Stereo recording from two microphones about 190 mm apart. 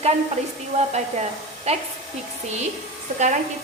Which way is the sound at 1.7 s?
35° right (ahead or behind).